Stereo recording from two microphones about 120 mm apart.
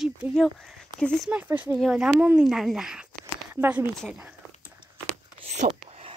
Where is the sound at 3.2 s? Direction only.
15° right (ahead or behind).